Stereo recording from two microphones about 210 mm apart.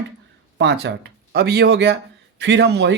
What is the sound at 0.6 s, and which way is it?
A man's voice, 55° right (ahead or behind).